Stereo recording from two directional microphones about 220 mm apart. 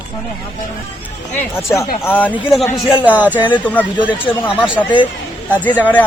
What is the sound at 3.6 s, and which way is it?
Speech, 5° left (ahead or behind).